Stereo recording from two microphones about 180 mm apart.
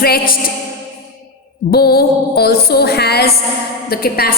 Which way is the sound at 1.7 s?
60° left (ahead or behind).